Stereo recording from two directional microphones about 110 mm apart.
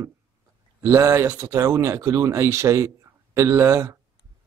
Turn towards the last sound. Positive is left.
turn(degrees=-25)  # may be behind; listen again after turning